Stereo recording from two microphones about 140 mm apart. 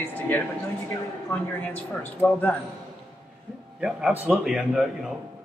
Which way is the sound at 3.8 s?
5° right (ahead or behind).